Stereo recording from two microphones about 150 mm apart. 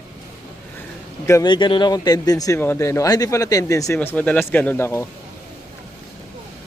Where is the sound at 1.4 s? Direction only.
30° left (ahead or behind); by 5.1 s 15° left (ahead or behind).